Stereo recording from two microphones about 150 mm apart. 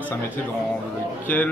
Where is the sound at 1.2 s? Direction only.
10° left (ahead or behind).